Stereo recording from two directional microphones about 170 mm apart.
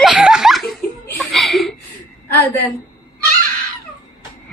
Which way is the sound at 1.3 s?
Centre (ahead or behind).